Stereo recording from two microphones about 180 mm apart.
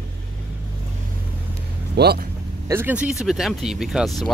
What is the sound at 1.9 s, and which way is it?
Speech, 60° right (ahead or behind).